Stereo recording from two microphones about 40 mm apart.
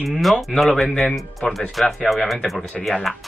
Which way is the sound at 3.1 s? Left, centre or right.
Centre.